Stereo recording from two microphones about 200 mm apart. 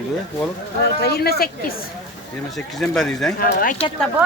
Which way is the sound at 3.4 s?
45° left (ahead or behind).